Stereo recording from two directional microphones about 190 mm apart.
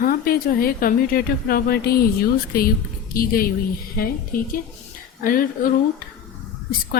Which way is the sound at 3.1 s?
50° left (ahead or behind).